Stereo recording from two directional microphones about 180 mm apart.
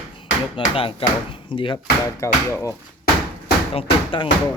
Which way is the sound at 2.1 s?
15° left (ahead or behind).